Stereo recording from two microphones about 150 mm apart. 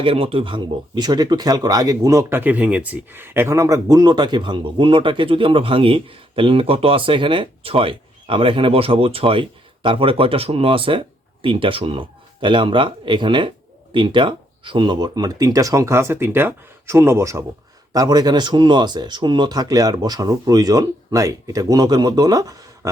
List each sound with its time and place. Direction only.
0.0 s speech: 35° right (ahead or behind)